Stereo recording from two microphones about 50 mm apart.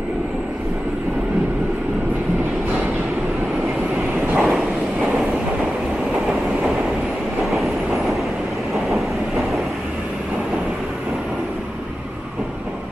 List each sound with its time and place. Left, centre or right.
3.9 s vehicle: right
7.4 s train: centre